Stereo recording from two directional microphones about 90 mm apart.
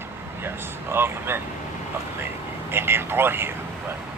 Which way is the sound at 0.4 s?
25° right (ahead or behind).